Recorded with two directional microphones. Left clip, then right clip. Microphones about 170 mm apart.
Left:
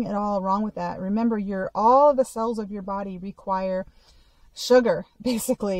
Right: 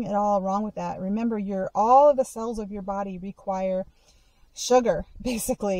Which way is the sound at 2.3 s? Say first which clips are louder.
Left 5 dB; 45° left (ahead or behind).